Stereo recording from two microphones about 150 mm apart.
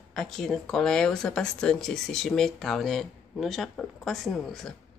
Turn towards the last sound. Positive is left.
turn(degrees=0)  # may be behind; listen again after turning